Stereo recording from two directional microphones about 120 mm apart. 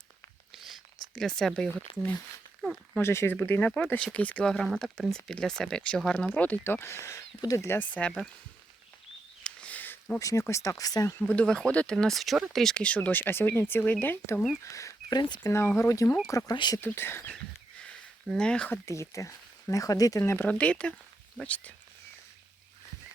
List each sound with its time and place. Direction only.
0.5 s a sound: centre (ahead or behind)
1.1 s speech: 5° left (ahead or behind)
2.6 s a sound: 5° left (ahead or behind)
3.0 s speech: 20° left (ahead or behind)
9.4 s a sound: 10° left (ahead or behind)
10.2 s speech: 25° left (ahead or behind)
11.3 s speech: 10° left (ahead or behind)
14.6 s speech: 25° left (ahead or behind)
15.5 s speech: 20° left (ahead or behind); by 16.8 s 35° left (ahead or behind)
16.8 s speech: 20° left (ahead or behind)
17.3 s a sound: 5° left (ahead or behind)
18.9 s speech: 25° left (ahead or behind)
20.5 s speech: 10° left (ahead or behind)